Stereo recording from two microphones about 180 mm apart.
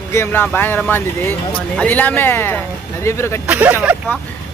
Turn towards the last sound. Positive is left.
turn(degrees=-10)  # may be behind; listen again after turning